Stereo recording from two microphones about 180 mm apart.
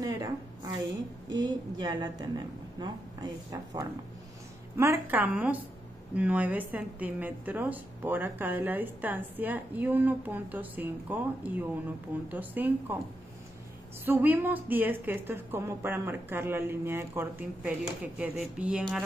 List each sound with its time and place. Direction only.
1.3 s a woman's voice: 20° right (ahead or behind)
14.0 s a woman's voice: 10° right (ahead or behind)